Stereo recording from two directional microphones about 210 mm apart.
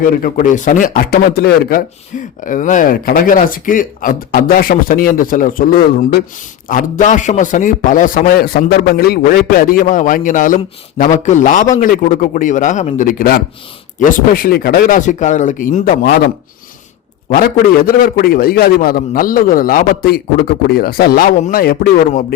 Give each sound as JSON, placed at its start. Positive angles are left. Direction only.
{"t": 0.0, "sound": "a man's voice", "side_deg": 45}